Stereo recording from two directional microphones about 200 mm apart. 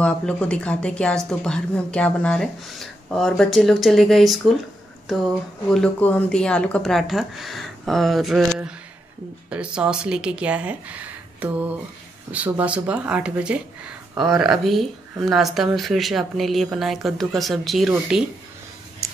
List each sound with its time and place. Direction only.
0.0 s speech: 5° left (ahead or behind)
5.8 s speech: 10° left (ahead or behind)